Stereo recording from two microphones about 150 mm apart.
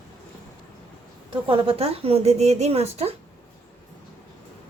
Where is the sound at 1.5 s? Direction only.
40° right (ahead or behind).